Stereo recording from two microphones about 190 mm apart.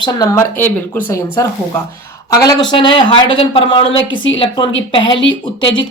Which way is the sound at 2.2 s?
20° left (ahead or behind).